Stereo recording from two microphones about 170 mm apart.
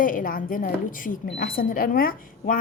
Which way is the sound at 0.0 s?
55° left (ahead or behind).